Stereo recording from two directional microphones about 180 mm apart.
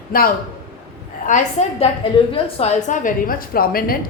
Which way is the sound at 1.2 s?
45° left (ahead or behind).